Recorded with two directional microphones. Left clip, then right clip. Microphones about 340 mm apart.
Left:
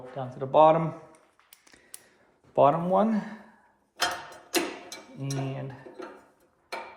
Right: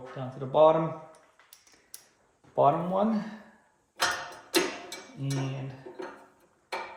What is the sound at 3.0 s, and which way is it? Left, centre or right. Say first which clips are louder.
Speech: left 1 dB; centre.